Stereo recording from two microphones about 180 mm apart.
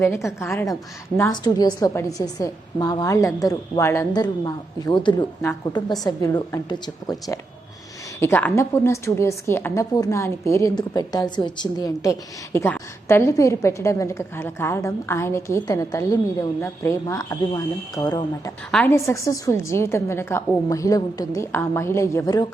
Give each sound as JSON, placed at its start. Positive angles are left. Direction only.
{"t": 0.0, "sound": "a woman's voice", "side_deg": 15}
{"t": 8.2, "sound": "a woman's voice", "side_deg": 10}